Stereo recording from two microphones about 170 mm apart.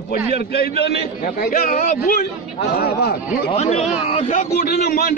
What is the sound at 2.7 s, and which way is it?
Speech, 65° left (ahead or behind).